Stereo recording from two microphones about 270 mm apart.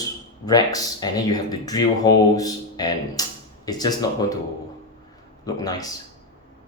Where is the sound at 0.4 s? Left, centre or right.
Centre.